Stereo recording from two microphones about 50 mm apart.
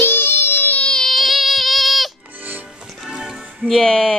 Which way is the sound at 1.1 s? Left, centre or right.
Centre.